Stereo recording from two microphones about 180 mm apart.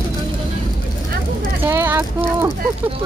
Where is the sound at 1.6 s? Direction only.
15° right (ahead or behind).